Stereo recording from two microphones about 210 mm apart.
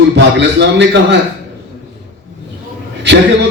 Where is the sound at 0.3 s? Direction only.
55° right (ahead or behind).